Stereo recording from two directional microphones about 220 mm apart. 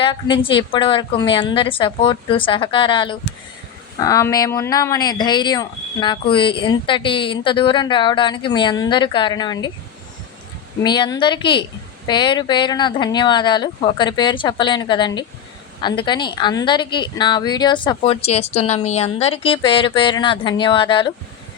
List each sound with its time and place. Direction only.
0.0 s speech: 25° left (ahead or behind)
10.8 s speech: 20° left (ahead or behind)